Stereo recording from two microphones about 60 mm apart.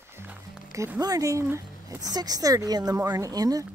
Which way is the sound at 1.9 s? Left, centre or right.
Right.